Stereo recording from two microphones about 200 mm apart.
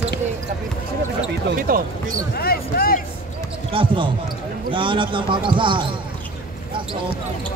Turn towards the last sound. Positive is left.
turn(degrees=-25)  # may be behind; listen again after turning